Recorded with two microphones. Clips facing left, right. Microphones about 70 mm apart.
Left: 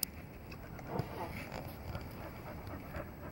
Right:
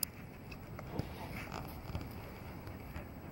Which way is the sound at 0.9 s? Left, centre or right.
Left.